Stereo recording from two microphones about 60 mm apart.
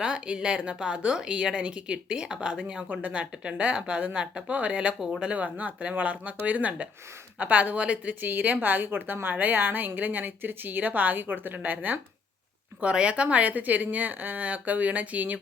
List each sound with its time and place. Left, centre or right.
0.0 s a woman's voice: centre
12.8 s speech: centre